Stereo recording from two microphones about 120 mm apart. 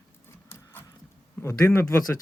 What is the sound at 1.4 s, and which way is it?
Speech, 20° left (ahead or behind).